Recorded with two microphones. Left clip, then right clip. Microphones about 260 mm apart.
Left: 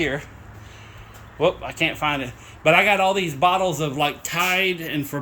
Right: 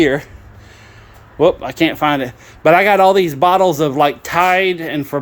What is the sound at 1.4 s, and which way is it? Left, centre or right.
Speech, right.